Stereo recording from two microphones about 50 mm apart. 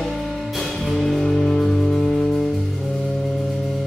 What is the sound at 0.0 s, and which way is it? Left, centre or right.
Music, centre.